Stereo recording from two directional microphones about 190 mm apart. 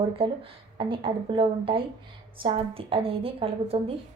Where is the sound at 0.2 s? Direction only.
30° right (ahead or behind).